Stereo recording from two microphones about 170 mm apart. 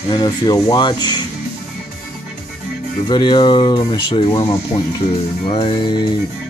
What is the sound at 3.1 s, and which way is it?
Speech, 25° left (ahead or behind).